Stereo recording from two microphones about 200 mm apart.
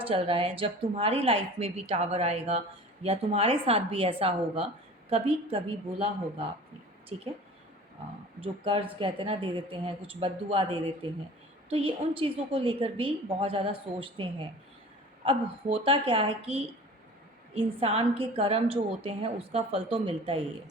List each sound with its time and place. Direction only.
0.0 s a woman's voice: 30° right (ahead or behind)
7.1 s speech: 30° right (ahead or behind)
8.4 s a woman's voice: 25° right (ahead or behind)
17.7 s a woman's voice: 30° right (ahead or behind)